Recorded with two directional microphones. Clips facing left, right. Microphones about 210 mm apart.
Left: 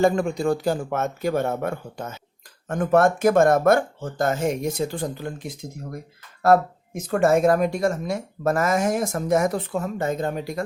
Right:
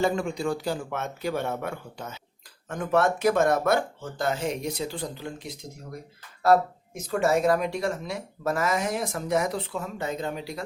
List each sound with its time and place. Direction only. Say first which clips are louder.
0.0 s speech: left 5 dB; 50° left (ahead or behind)